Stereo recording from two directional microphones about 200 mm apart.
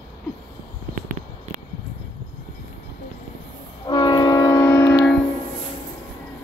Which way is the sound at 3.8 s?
20° left (ahead or behind).